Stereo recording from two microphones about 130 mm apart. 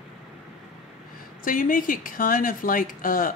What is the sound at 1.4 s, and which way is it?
Speech, 90° left.